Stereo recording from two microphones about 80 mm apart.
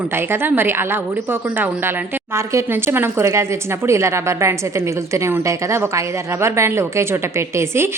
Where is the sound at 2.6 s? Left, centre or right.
Right.